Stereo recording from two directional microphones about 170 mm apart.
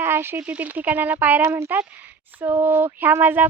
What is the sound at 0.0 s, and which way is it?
A child's voice, 15° right (ahead or behind).